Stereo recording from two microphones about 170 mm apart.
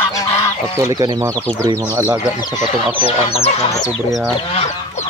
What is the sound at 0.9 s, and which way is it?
Speech, 20° right (ahead or behind).